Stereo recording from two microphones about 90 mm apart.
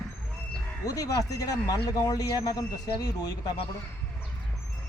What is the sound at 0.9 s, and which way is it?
Speech, 40° left (ahead or behind).